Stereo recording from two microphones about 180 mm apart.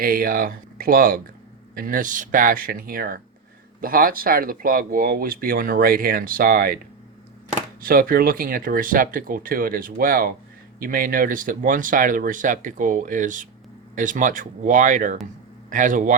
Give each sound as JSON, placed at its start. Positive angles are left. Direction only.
{"t": 0.0, "sound": "speech", "side_deg": -55}
{"t": 7.8, "sound": "speech", "side_deg": -55}